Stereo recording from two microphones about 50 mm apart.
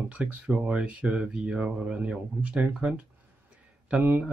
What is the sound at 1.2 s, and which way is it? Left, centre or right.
Speech, centre.